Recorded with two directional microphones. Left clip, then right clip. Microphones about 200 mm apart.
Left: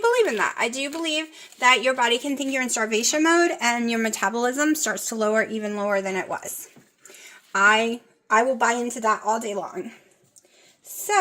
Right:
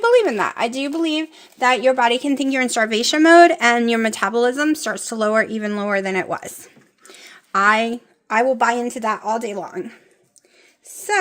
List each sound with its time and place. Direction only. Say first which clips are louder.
0.0 s a woman's voice: right 5 dB; 55° right (ahead or behind)